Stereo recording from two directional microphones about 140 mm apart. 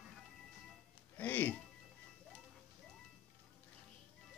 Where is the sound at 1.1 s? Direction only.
10° left (ahead or behind).